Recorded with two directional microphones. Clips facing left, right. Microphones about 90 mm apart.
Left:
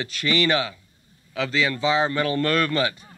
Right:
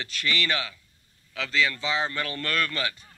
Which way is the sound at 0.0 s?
20° left (ahead or behind).